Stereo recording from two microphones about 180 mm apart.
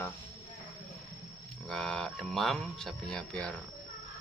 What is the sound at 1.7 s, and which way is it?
Speech, 5° left (ahead or behind).